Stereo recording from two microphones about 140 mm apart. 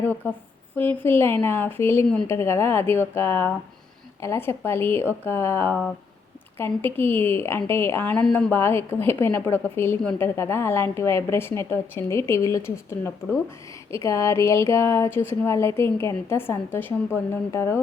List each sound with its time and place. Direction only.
0.0 s a woman's voice: 15° left (ahead or behind)